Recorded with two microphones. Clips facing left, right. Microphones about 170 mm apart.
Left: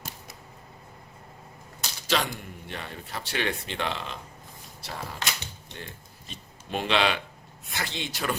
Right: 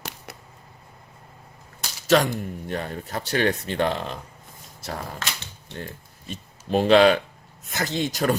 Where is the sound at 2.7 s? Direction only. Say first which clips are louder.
Right 6 dB; 45° right (ahead or behind).